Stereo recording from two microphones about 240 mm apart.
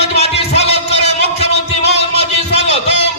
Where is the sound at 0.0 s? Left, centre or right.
Left.